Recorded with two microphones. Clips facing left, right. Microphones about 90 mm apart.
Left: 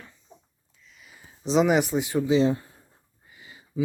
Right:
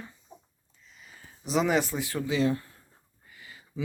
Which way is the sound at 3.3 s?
20° left (ahead or behind).